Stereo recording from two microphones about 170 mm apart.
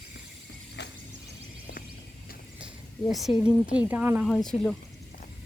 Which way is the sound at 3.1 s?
Centre (ahead or behind).